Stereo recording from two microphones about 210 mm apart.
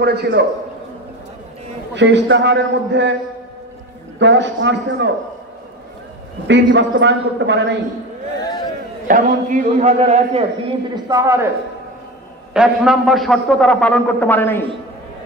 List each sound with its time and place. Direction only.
0.0 s a man's voice: 50° right (ahead or behind)
2.0 s a man's voice: 60° right (ahead or behind)
4.2 s a man's voice: 60° right (ahead or behind)
6.4 s a man's voice: 60° right (ahead or behind)
8.4 s a sound: 20° left (ahead or behind)
9.0 s a man's voice: 40° right (ahead or behind)
11.1 s a man's voice: 15° right (ahead or behind)
12.5 s a man's voice: centre (ahead or behind)